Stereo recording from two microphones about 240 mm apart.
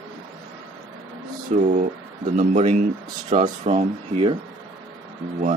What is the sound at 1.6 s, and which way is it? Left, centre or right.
Speech, right.